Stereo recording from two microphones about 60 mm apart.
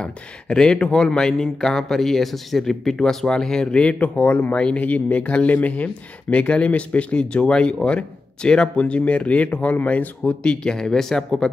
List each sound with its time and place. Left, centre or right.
0.0 s speech: centre